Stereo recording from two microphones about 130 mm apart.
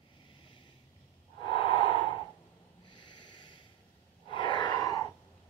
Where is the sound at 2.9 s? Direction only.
35° left (ahead or behind).